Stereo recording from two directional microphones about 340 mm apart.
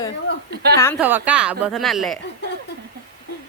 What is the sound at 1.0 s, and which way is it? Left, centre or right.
A woman's voice, centre.